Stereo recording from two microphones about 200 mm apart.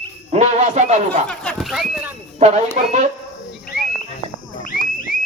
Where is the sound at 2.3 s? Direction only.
35° right (ahead or behind).